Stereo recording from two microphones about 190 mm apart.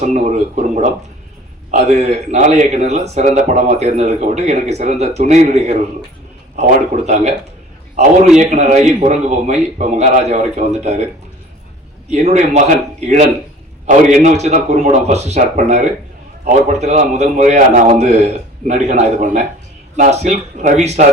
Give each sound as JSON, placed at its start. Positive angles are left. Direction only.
{"t": 0.0, "sound": "speech", "side_deg": -35}
{"t": 12.1, "sound": "speech", "side_deg": -35}